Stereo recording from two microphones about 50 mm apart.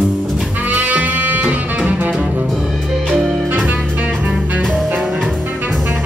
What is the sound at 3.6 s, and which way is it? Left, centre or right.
Music, right.